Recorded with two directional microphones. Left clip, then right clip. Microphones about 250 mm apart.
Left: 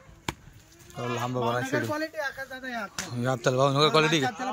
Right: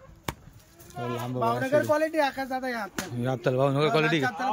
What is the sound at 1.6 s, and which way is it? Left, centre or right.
Speech, right.